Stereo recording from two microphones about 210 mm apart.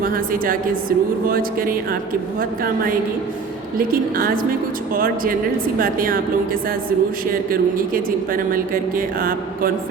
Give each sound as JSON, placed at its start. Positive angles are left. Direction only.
{"t": 0.0, "sound": "speech", "side_deg": -40}
{"t": 3.8, "sound": "speech", "side_deg": -45}